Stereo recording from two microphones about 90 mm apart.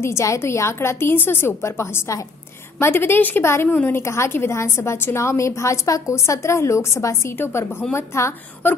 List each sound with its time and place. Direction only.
0.0 s a woman's voice: 35° left (ahead or behind)